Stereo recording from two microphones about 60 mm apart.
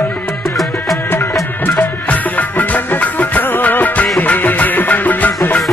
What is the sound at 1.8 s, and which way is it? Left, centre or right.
Music, left.